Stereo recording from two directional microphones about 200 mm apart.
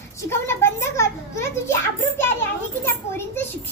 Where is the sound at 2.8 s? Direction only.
10° left (ahead or behind).